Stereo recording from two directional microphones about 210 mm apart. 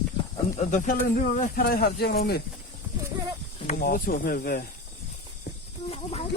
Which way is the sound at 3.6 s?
40° left (ahead or behind).